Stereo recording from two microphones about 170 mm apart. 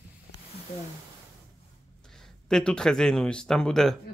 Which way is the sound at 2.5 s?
5° left (ahead or behind).